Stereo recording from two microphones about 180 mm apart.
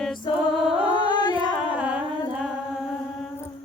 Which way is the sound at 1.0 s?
25° left (ahead or behind).